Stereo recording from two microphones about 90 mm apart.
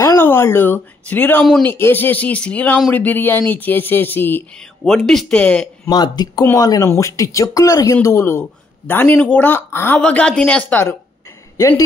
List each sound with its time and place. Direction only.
0.0 s speech: 30° left (ahead or behind)
4.8 s speech: 5° left (ahead or behind)
5.9 s speech: 50° left (ahead or behind)
6.4 s speech: 35° left (ahead or behind)
9.9 s speech: 15° left (ahead or behind)
11.5 s a woman's voice: 30° left (ahead or behind)